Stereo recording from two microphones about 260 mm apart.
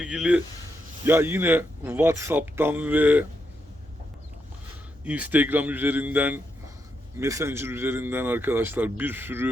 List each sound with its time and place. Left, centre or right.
0.0 s speech: centre
5.0 s speech: centre